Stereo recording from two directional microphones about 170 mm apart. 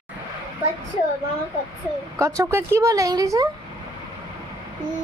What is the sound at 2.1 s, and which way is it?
Speech, 20° right (ahead or behind).